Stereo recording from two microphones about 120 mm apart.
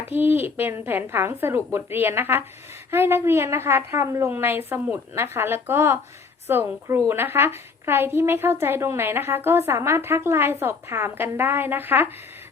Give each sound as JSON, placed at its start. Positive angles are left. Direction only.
{"t": 0.1, "sound": "a woman's voice", "side_deg": -15}